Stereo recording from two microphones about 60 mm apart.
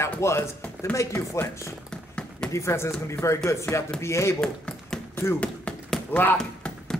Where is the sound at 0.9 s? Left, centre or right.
Left.